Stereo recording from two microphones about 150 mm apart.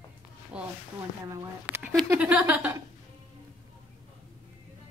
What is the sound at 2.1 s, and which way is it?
Speech, 10° right (ahead or behind).